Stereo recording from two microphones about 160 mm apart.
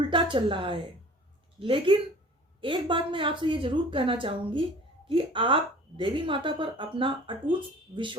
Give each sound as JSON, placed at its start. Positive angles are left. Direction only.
{"t": 0.1, "sound": "a woman's voice", "side_deg": -30}